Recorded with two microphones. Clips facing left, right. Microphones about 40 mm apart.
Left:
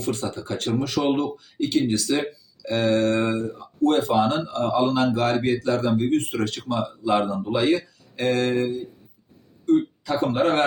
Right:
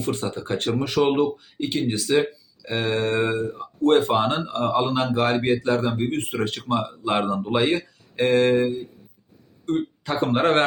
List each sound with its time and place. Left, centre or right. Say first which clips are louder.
0.2 s speech: right 2 dB; right
3.8 s speech: right 1 dB; right
9.6 s speech: left 4 dB; right